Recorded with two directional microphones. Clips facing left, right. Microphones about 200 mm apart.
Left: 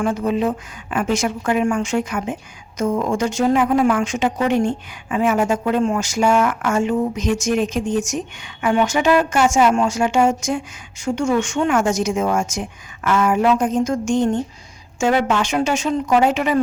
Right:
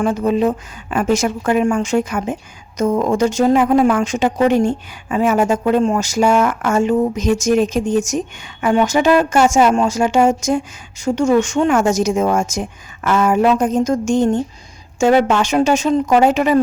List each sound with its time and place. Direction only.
0.0 s a woman's voice: 40° right (ahead or behind)